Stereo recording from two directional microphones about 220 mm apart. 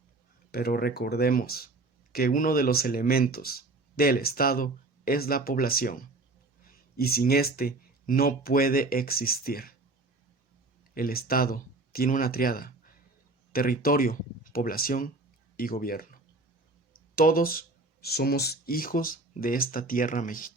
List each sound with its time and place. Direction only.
0.5 s speech: 45° left (ahead or behind)
10.9 s speech: 40° left (ahead or behind)